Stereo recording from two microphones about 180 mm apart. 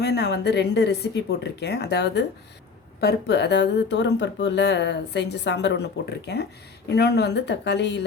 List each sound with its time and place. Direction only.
0.0 s speech: 65° left (ahead or behind)